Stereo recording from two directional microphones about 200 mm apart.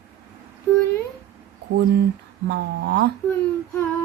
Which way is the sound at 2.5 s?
55° right (ahead or behind).